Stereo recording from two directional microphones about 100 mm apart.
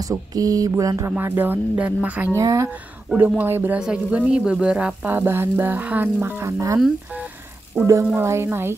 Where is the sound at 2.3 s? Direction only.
30° right (ahead or behind).